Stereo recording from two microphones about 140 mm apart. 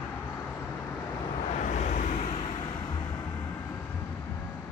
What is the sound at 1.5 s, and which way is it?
Vehicle, 50° left (ahead or behind).